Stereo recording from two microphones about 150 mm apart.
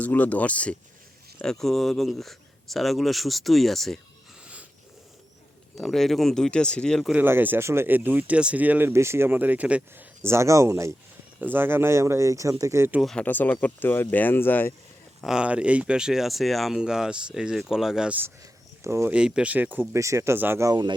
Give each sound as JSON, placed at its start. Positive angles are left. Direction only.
{"t": 0.0, "sound": "speech", "side_deg": 10}
{"t": 5.7, "sound": "speech", "side_deg": 0}
{"t": 7.1, "sound": "speech", "side_deg": -15}
{"t": 13.0, "sound": "speech", "side_deg": 5}
{"t": 15.2, "sound": "speech", "side_deg": -5}
{"t": 18.8, "sound": "speech", "side_deg": -20}
{"t": 19.1, "sound": "speech", "side_deg": -5}